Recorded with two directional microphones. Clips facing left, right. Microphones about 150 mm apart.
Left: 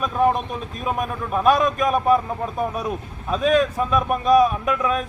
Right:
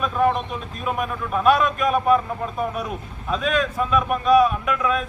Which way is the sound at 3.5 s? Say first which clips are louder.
Left 2 dB; 35° left (ahead or behind).